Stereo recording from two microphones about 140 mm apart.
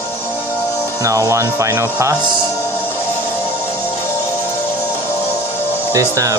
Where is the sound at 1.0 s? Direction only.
25° right (ahead or behind).